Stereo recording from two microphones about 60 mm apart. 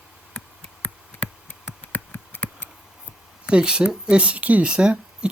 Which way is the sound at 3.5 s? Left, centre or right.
Centre.